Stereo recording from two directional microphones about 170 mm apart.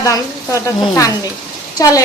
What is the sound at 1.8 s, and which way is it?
Speech, 20° left (ahead or behind).